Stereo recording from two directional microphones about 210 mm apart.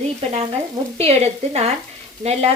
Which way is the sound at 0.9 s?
30° right (ahead or behind).